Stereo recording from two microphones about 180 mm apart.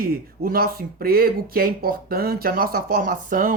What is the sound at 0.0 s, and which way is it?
Speech, 55° right (ahead or behind).